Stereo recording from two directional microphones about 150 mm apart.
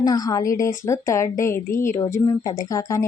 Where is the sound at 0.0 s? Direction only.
25° left (ahead or behind).